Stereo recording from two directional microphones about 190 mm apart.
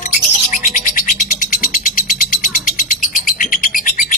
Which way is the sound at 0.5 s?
45° left (ahead or behind).